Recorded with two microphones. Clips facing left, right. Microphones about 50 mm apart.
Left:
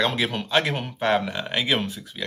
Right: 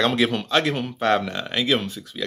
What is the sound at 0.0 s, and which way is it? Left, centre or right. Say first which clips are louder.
Speech: right 3 dB; centre.